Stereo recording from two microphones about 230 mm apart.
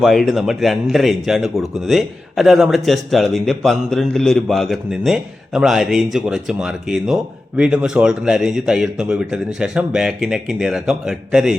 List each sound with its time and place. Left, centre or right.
0.0 s a man's voice: centre